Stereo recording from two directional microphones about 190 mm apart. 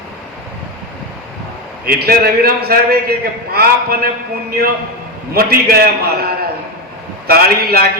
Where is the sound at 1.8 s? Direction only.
55° right (ahead or behind).